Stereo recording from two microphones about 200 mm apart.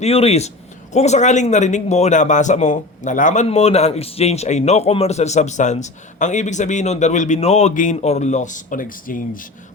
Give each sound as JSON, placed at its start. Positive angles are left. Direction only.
{"t": 0.0, "sound": "a man's voice", "side_deg": 30}